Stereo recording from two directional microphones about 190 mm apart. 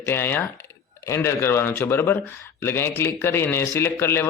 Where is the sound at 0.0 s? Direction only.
10° left (ahead or behind).